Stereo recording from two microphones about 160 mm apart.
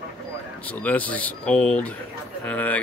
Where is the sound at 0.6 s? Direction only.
10° left (ahead or behind).